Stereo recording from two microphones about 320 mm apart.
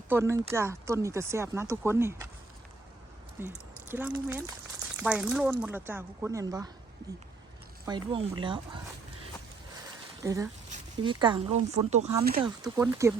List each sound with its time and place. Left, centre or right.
0.1 s speech: centre
3.4 s speech: centre
7.9 s speech: centre
10.2 s speech: centre
12.4 s speech: centre